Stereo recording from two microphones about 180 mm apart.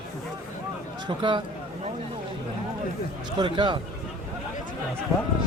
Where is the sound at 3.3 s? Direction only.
25° right (ahead or behind).